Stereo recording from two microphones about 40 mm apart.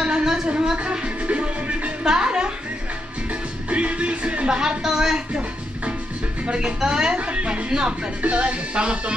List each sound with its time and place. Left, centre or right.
0.0 s a sound: centre
0.5 s a woman's voice: right
1.0 s music: right
2.0 s speech: centre
3.7 s music: right
4.5 s speech: centre
6.4 s speech: right
7.2 s speech: right